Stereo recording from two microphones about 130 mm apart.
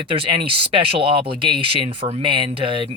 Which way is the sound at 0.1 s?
40° right (ahead or behind).